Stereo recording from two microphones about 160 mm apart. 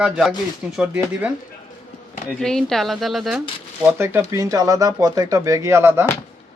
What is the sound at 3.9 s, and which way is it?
Speech, 15° right (ahead or behind).